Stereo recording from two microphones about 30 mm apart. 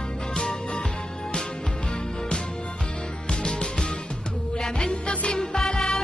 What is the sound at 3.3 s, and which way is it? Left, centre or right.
Music, left.